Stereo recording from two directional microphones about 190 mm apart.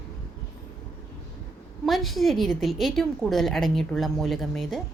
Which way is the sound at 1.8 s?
Centre (ahead or behind).